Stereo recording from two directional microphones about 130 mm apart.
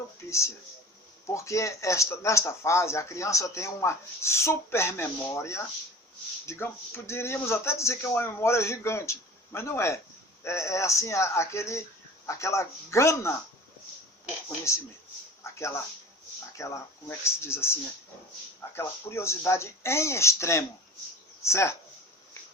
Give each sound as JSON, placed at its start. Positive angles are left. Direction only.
{"t": 0.3, "sound": "speech", "side_deg": 20}
{"t": 14.7, "sound": "speech", "side_deg": 20}